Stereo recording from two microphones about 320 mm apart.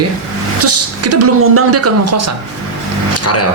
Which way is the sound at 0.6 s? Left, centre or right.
Right.